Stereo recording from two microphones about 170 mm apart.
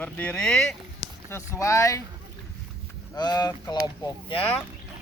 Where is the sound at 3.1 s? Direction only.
25° left (ahead or behind).